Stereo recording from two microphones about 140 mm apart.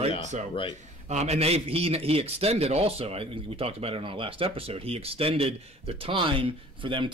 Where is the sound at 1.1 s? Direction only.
50° right (ahead or behind).